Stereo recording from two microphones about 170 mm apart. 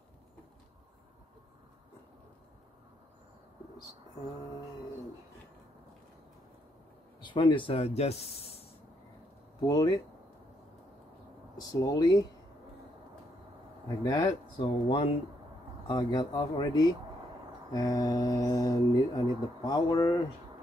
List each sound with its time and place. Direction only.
7.2 s speech: 30° left (ahead or behind)
9.7 s speech: 25° left (ahead or behind)
11.5 s speech: 20° left (ahead or behind)
13.8 s speech: 25° left (ahead or behind)